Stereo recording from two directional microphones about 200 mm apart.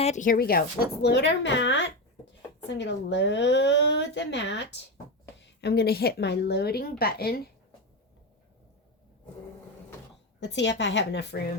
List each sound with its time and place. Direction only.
0.0 s a woman's voice: 35° left (ahead or behind)
10.4 s speech: 60° left (ahead or behind)